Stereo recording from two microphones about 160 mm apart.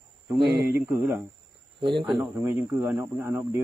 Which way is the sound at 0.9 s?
10° right (ahead or behind).